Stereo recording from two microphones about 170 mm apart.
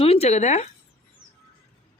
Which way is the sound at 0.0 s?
35° left (ahead or behind).